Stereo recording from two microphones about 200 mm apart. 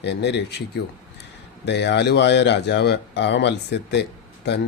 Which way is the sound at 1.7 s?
60° left (ahead or behind).